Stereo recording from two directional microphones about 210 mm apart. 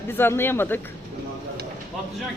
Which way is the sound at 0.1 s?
10° left (ahead or behind).